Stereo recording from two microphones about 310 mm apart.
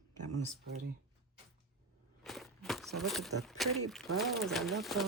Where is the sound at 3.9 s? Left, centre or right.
Centre.